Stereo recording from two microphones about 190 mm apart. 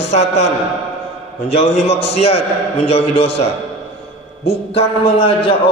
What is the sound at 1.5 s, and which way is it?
A man's voice, 35° left (ahead or behind).